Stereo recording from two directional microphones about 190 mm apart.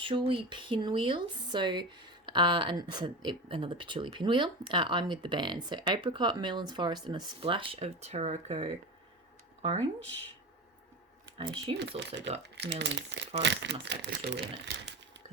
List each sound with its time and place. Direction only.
0.0 s speech: 25° right (ahead or behind)
11.3 s speech: 30° right (ahead or behind)
11.8 s speech: 70° right (ahead or behind)